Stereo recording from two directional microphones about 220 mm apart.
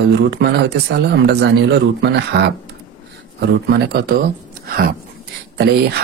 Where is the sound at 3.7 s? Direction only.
45° right (ahead or behind).